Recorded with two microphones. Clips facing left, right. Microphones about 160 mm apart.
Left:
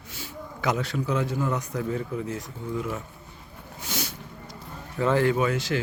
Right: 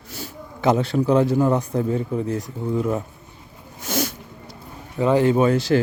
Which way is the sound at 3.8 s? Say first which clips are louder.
Right 9 dB; 45° right (ahead or behind).